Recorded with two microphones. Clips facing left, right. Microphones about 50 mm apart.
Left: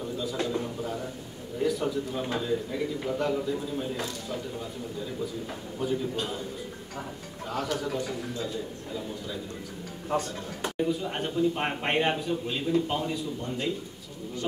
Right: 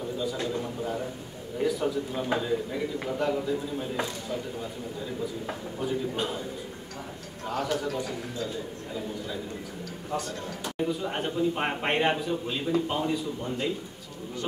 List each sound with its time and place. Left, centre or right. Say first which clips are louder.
0.2 s a man's voice: left 1 dB; centre
5.8 s a man's voice: left 2 dB; centre
7.4 s a man's voice: right 2 dB; centre
10.8 s a man's voice: even; centre